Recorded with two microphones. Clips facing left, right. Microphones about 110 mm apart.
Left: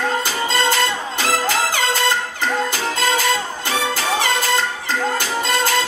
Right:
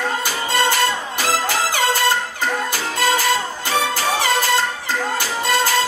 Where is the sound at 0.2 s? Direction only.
20° left (ahead or behind).